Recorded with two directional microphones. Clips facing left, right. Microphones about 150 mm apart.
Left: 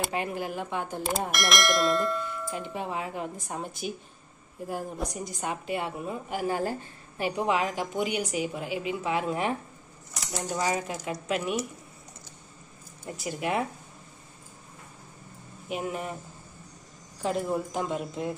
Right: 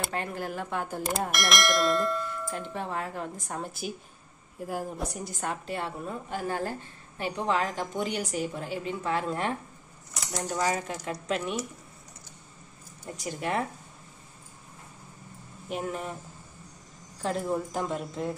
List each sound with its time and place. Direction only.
0.1 s speech: 5° left (ahead or behind)
5.4 s a woman's voice: 5° left (ahead or behind)
10.6 s a woman's voice: 10° left (ahead or behind)
13.0 s a woman's voice: 5° left (ahead or behind)
15.7 s speech: 5° left (ahead or behind)
17.2 s speech: 5° left (ahead or behind)